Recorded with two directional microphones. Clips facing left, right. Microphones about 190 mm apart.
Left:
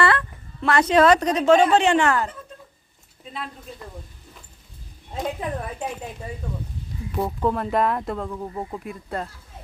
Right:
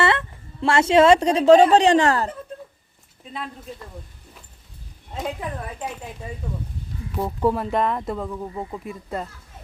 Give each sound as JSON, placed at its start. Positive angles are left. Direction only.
{"t": 0.0, "sound": "a woman's voice", "side_deg": -25}
{"t": 7.1, "sound": "speech", "side_deg": 0}